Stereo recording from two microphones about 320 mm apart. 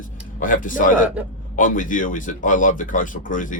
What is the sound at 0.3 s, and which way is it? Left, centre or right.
A man's voice, left.